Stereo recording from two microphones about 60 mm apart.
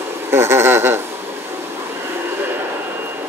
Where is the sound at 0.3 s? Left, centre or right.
Right.